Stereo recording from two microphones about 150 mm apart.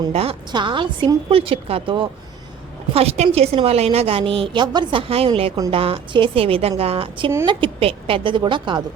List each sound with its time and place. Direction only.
0.1 s a woman's voice: 40° right (ahead or behind)